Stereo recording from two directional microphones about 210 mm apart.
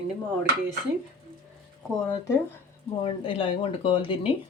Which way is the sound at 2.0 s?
10° left (ahead or behind).